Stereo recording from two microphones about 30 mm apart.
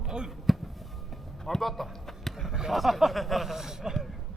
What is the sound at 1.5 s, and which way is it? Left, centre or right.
Speech, centre.